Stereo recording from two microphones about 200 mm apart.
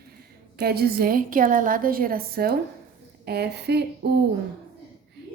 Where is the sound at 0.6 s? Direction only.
50° right (ahead or behind).